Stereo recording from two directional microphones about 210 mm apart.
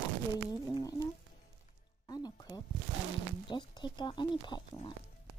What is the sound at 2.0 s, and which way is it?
Music, 20° left (ahead or behind).